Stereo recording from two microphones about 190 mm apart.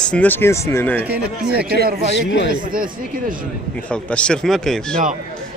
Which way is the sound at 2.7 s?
50° right (ahead or behind).